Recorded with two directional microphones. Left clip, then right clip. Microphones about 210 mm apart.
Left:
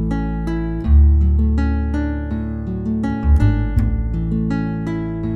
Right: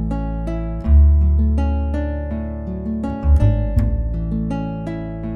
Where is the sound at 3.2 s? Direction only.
Centre (ahead or behind).